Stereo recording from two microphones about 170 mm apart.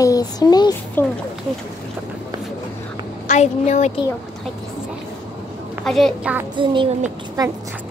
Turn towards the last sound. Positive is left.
turn(degrees=-25)  # may be behind; listen again after turning